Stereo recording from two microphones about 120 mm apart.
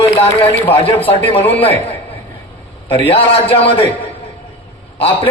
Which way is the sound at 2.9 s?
45° left (ahead or behind).